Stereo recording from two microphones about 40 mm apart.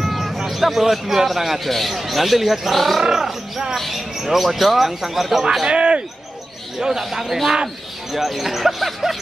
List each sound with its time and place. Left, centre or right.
0.0 s a man's voice: centre
3.7 s speech: centre
5.7 s speech: right
6.8 s speech: centre